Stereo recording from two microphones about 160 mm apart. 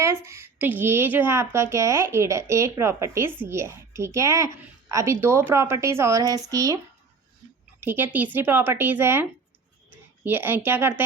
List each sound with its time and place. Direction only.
0.0 s a woman's voice: 15° right (ahead or behind)
7.8 s a woman's voice: 10° right (ahead or behind)
10.2 s a woman's voice: 15° right (ahead or behind)